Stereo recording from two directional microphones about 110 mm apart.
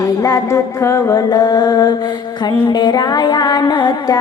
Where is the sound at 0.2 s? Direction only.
30° left (ahead or behind).